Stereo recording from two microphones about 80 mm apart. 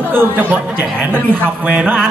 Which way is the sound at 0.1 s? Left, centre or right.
Right.